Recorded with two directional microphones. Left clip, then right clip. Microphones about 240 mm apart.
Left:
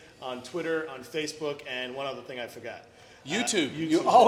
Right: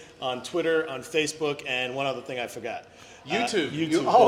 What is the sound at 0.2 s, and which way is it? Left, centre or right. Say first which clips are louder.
A man's voice: right 6 dB; right.